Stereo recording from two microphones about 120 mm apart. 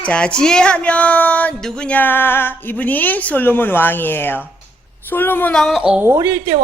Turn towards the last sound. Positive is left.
turn(degrees=-25)  # may be behind; listen again after turning